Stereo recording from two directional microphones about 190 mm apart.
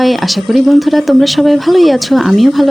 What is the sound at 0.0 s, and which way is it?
Speech, centre (ahead or behind).